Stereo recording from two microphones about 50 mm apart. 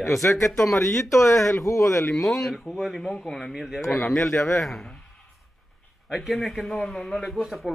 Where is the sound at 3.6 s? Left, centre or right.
Centre.